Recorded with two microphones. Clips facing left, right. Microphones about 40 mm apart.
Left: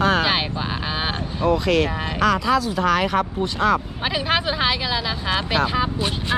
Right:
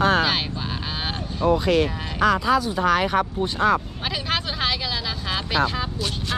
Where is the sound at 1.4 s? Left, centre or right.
Left.